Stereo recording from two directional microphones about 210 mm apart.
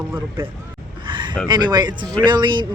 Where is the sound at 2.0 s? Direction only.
5° left (ahead or behind).